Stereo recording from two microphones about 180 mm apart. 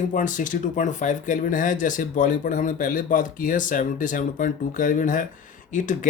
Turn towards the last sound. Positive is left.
turn(degrees=45)  # may be behind; listen again after turning